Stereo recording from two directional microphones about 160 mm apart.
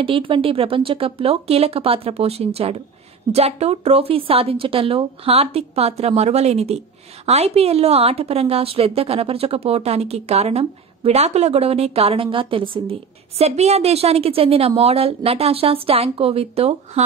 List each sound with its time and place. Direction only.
0.0 s a woman's voice: 35° right (ahead or behind)